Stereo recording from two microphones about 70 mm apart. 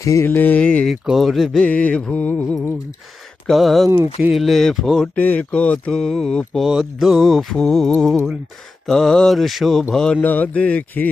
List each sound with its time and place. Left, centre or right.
0.2 s speech: left
0.6 s mantra: centre
0.9 s music: centre
1.6 s mantra: centre
3.4 s speech: centre
4.3 s music: centre
5.1 s speech: left
5.9 s mantra: centre
6.7 s music: centre
9.9 s mantra: centre
10.2 s speech: left